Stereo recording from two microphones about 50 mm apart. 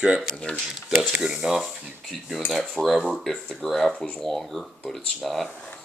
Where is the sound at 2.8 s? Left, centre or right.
Left.